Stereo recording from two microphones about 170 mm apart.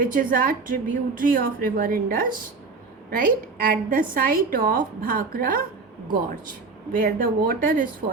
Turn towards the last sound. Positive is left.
turn(degrees=-55)  # may be behind; listen again after turning